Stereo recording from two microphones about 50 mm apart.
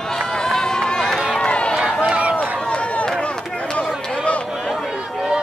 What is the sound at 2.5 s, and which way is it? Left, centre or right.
Run, centre.